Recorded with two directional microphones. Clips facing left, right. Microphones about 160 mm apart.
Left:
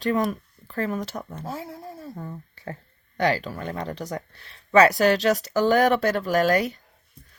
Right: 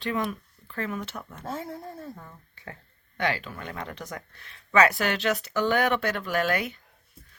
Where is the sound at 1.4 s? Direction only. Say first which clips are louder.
Left 1 dB; 5° left (ahead or behind).